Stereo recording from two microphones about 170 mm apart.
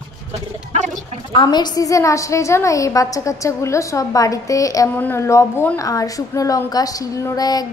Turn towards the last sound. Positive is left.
turn(degrees=25)  # may be behind; listen again after turning